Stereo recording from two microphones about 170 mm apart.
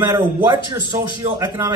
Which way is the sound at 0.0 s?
25° right (ahead or behind).